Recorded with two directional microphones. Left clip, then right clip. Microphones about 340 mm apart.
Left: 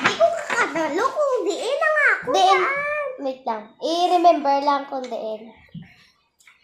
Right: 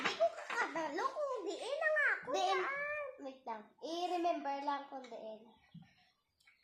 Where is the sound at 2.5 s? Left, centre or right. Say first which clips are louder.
Left 18 dB; centre.